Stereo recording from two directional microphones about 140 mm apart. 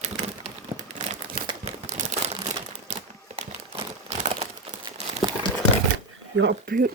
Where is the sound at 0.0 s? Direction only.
55° right (ahead or behind).